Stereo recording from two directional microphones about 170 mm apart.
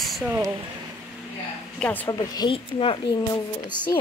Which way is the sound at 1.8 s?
10° left (ahead or behind).